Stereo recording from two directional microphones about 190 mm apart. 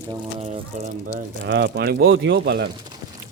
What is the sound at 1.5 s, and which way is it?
Speech, 65° right (ahead or behind).